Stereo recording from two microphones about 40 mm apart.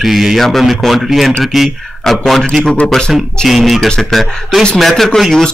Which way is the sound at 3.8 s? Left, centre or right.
Centre.